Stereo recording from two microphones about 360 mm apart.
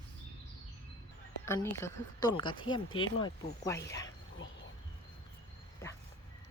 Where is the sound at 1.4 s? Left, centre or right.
Centre.